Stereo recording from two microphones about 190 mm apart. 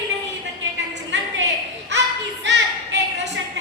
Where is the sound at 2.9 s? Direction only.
70° right (ahead or behind).